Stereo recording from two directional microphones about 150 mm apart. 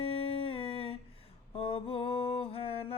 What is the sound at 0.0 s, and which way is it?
Humming, 40° left (ahead or behind).